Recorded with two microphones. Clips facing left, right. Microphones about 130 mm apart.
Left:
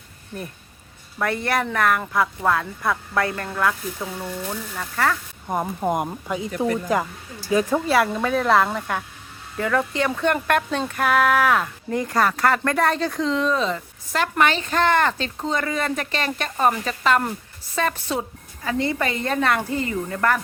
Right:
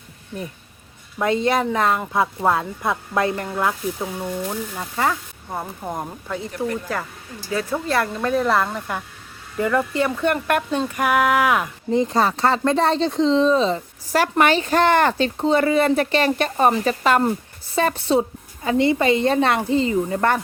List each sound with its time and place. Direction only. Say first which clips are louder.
1.2 s a woman's voice: right 4 dB; 20° right (ahead or behind)
5.9 s speech: left 4 dB; 15° left (ahead or behind); by 11.9 s 10° right (ahead or behind)
11.9 s a woman's voice: right 2 dB; 25° right (ahead or behind)